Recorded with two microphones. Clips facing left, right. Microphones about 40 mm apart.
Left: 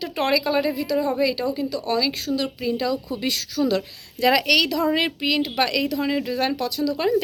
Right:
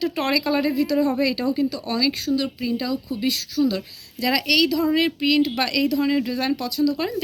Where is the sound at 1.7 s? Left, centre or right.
Left.